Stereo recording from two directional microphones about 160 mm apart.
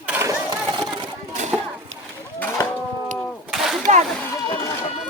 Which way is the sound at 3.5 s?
Centre (ahead or behind).